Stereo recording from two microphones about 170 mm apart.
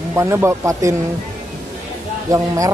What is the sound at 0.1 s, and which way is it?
Speech, 15° right (ahead or behind).